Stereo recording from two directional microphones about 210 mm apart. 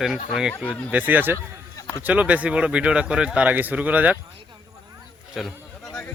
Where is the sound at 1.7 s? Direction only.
15° left (ahead or behind).